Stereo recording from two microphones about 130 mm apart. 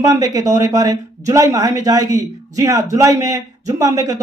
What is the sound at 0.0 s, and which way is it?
Speech, 25° right (ahead or behind).